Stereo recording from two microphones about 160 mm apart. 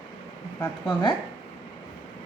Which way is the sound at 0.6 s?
30° left (ahead or behind).